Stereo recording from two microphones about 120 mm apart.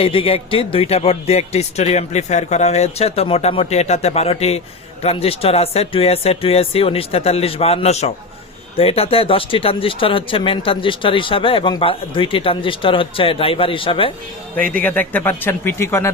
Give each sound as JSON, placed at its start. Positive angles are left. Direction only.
{"t": 0.0, "sound": "a man's voice", "side_deg": 50}
{"t": 8.7, "sound": "speech", "side_deg": 55}
{"t": 14.5, "sound": "a man's voice", "side_deg": 10}